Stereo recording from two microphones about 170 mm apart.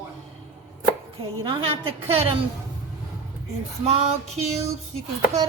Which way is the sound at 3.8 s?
40° right (ahead or behind).